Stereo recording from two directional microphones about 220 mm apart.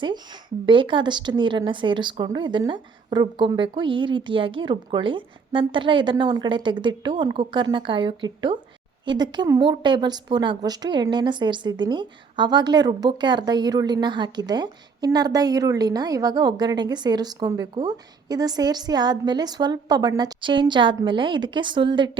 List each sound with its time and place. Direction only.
0.6 s a woman's voice: 20° right (ahead or behind)